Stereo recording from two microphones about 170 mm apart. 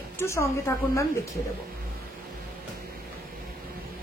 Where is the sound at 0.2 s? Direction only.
15° left (ahead or behind).